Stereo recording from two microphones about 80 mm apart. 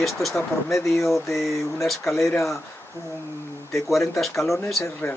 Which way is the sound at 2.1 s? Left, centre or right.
Left.